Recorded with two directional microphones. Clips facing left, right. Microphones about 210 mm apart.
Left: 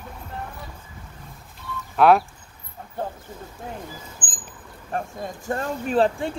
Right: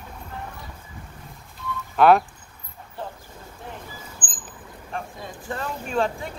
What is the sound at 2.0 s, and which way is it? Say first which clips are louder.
Speech: even; centre (ahead or behind).